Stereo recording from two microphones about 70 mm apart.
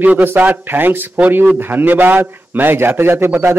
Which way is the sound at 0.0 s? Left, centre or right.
Right.